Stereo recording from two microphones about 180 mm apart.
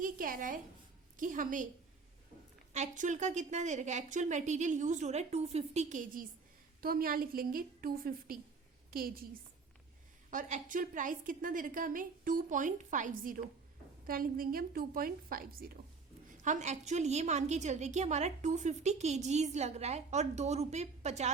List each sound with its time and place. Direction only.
0.0 s a woman's voice: 50° right (ahead or behind)
2.7 s a woman's voice: 40° right (ahead or behind)
10.3 s a woman's voice: 45° right (ahead or behind)
16.4 s a woman's voice: 40° right (ahead or behind)